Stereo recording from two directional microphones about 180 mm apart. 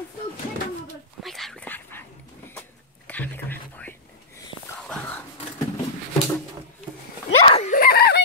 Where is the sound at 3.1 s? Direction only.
10° left (ahead or behind).